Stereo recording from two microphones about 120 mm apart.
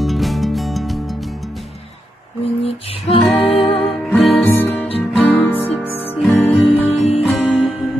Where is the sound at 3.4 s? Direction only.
50° left (ahead or behind).